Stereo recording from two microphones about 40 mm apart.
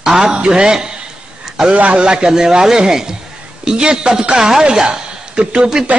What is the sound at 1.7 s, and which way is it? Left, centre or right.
Speech, right.